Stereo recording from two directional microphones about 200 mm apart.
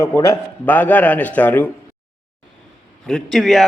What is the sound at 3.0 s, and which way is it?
Speech, centre (ahead or behind).